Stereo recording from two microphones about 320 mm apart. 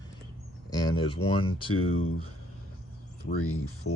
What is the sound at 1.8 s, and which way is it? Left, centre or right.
Speech, left.